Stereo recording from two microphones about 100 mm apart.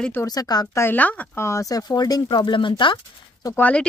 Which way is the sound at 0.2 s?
40° left (ahead or behind).